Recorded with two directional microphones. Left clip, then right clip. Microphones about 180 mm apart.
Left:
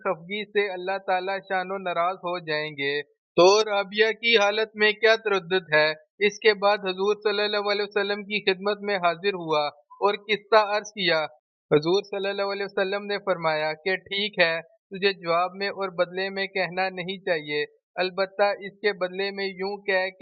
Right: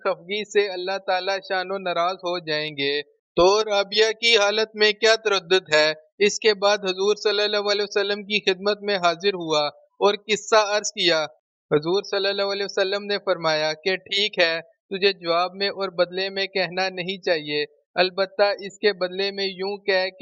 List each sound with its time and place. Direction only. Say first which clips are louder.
0.0 s a man's voice: right 3 dB; 45° right (ahead or behind)
3.3 s a man's voice: even; centre (ahead or behind)
3.7 s a man's voice: right 3 dB; 45° right (ahead or behind)
11.7 s a man's voice: even; centre (ahead or behind)
12.1 s a man's voice: right 4 dB; 40° right (ahead or behind)